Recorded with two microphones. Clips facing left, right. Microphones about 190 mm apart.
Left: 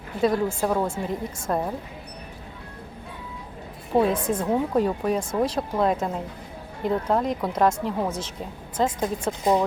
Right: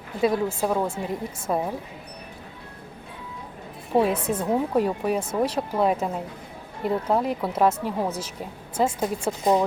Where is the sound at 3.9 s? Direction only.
5° right (ahead or behind).